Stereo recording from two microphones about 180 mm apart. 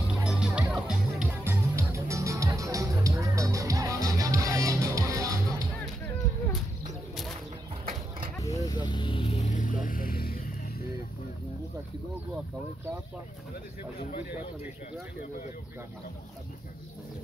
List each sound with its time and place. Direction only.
0.1 s music: 5° right (ahead or behind)
8.4 s vehicle: 20° left (ahead or behind)
9.5 s vehicle: 45° left (ahead or behind)